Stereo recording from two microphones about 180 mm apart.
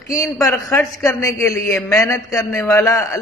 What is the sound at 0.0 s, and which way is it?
A man's voice, 15° left (ahead or behind).